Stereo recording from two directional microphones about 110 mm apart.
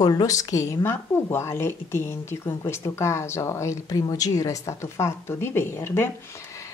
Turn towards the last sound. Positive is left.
turn(degrees=20)  # may be behind; listen again after turning